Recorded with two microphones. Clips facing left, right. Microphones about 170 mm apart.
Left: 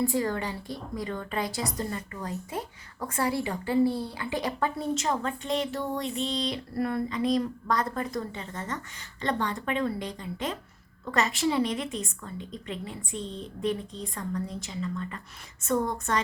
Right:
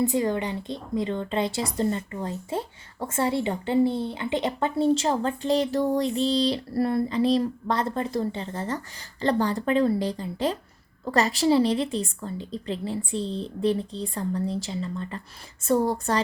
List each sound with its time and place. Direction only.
0.0 s a woman's voice: 20° right (ahead or behind)